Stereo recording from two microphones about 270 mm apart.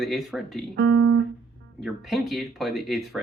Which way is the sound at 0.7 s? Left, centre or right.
Right.